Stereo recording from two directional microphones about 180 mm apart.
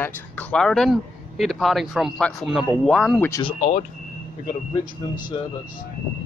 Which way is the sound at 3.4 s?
30° left (ahead or behind).